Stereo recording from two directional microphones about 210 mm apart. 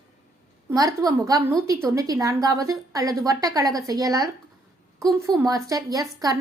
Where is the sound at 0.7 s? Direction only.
15° right (ahead or behind).